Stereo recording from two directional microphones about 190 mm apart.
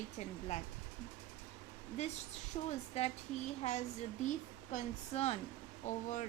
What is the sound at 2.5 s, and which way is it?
Speech, 35° left (ahead or behind).